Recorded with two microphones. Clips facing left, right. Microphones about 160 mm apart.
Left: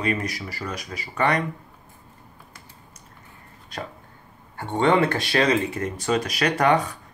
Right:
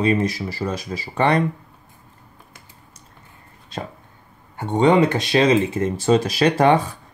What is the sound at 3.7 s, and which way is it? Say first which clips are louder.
A man's voice: right 3 dB; 25° right (ahead or behind).